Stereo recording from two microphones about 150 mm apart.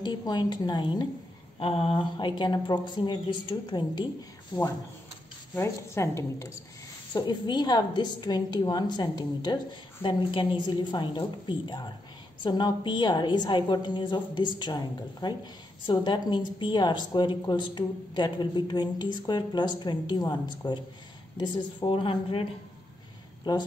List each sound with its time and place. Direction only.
0.0 s a woman's voice: 25° left (ahead or behind)
1.6 s speech: 40° left (ahead or behind)
5.5 s a woman's voice: 20° left (ahead or behind)